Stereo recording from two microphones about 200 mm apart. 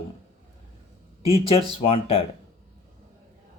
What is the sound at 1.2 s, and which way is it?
Speech, 30° left (ahead or behind).